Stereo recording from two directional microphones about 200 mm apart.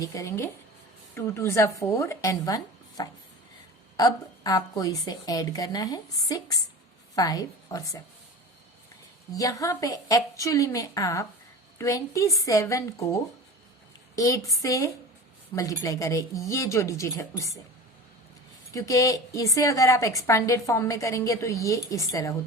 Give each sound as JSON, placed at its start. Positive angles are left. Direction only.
{"t": 0.0, "sound": "a woman's voice", "side_deg": 15}
{"t": 9.3, "sound": "a woman's voice", "side_deg": 15}
{"t": 18.7, "sound": "a woman's voice", "side_deg": 15}